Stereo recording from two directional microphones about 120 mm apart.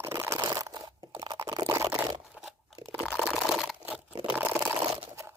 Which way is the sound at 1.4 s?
30° right (ahead or behind).